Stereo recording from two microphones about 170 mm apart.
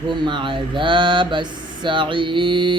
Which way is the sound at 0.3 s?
30° right (ahead or behind).